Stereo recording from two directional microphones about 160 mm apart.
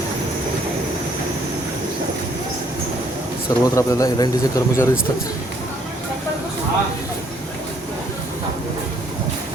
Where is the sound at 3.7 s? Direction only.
25° left (ahead or behind).